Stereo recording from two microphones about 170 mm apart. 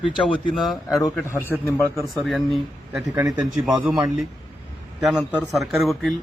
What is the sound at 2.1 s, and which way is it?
A man's voice, centre (ahead or behind).